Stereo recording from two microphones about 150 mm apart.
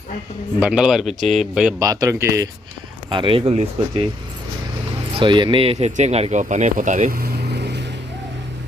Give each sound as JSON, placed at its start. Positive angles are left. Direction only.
{"t": 0.6, "sound": "speech", "side_deg": -5}
{"t": 1.8, "sound": "a man's voice", "side_deg": -20}
{"t": 3.1, "sound": "speech", "side_deg": -35}
{"t": 5.1, "sound": "speech", "side_deg": -30}